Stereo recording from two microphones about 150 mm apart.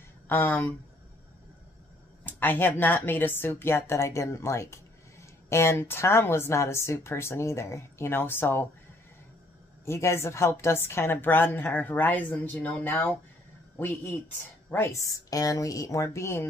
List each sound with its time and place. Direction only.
0.3 s a woman's voice: 15° left (ahead or behind)
2.2 s a woman's voice: 15° left (ahead or behind)
9.8 s a woman's voice: 20° left (ahead or behind)